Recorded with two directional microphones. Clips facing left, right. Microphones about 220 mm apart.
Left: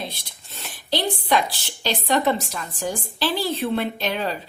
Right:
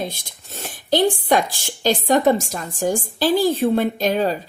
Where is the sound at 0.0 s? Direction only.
45° right (ahead or behind).